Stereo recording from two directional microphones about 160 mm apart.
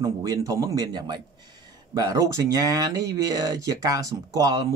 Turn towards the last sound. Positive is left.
turn(degrees=-25)  # may be behind; listen again after turning